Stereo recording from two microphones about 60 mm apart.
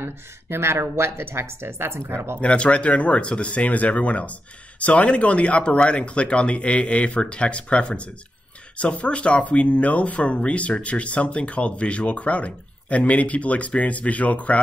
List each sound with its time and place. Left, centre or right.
0.0 s speech: right
2.4 s speech: centre